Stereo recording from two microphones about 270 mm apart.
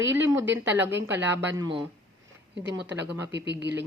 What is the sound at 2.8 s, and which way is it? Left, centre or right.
Speech, right.